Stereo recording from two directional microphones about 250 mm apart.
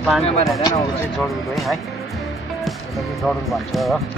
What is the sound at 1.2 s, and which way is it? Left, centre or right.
Speech, centre.